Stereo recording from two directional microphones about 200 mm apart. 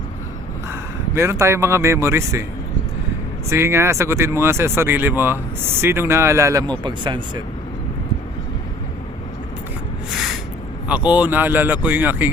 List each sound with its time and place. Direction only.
0.7 s speech: 15° right (ahead or behind)
3.5 s speech: 15° right (ahead or behind)
10.8 s speech: 5° right (ahead or behind)